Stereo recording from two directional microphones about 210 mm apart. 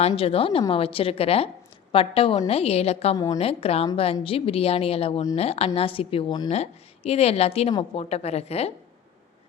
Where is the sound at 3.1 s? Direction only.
15° left (ahead or behind).